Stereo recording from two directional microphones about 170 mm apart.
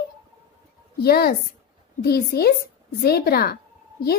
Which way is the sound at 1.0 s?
65° left (ahead or behind).